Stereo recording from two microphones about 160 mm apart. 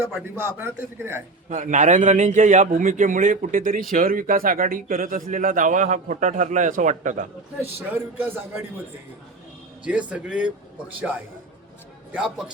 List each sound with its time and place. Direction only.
0.1 s speech: 10° right (ahead or behind)
1.5 s a man's voice: 50° right (ahead or behind)
7.8 s speech: 15° right (ahead or behind)
9.8 s speech: 10° right (ahead or behind)